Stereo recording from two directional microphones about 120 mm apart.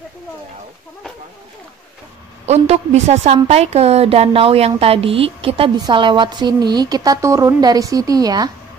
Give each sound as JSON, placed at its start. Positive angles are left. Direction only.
{"t": 2.4, "sound": "a woman's voice", "side_deg": -60}
{"t": 5.8, "sound": "a woman's voice", "side_deg": -40}